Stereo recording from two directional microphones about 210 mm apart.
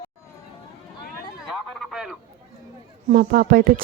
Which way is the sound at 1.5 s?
Centre (ahead or behind).